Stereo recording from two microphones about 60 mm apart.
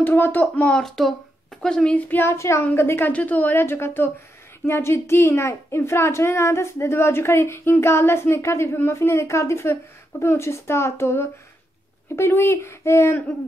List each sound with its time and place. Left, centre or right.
0.0 s speech: left
0.7 s a woman's voice: centre
2.0 s speech: left
2.2 s a woman's voice: left
3.1 s speech: left
3.6 s a woman's voice: left